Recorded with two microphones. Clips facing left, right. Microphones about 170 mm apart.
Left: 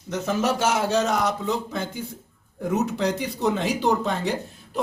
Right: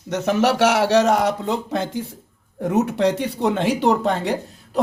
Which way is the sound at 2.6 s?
70° right (ahead or behind).